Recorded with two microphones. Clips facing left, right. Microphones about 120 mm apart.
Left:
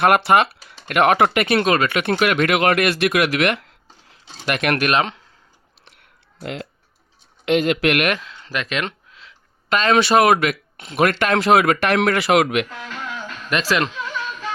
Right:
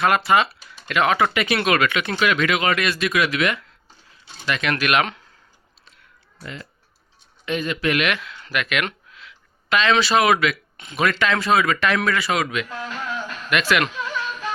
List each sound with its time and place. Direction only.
0.0 s speech: 60° left (ahead or behind); by 2.0 s 35° left (ahead or behind)
2.0 s speech: 55° left (ahead or behind)
4.9 s speech: 30° left (ahead or behind)
5.8 s a sound: 70° left (ahead or behind)
7.4 s speech: 75° left (ahead or behind)
8.0 s speech: 40° left (ahead or behind)
8.4 s a sound: 35° left (ahead or behind)
9.6 s speech: 45° left (ahead or behind)
11.3 s speech: 65° left (ahead or behind)
12.6 s speech: 10° right (ahead or behind)
13.5 s speech: 35° left (ahead or behind)
13.9 s music: 10° right (ahead or behind)